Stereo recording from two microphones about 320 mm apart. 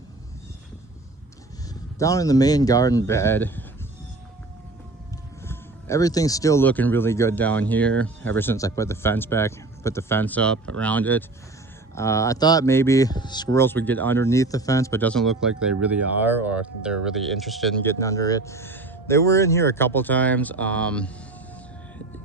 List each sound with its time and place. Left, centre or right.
2.0 s speech: centre
5.5 s speech: centre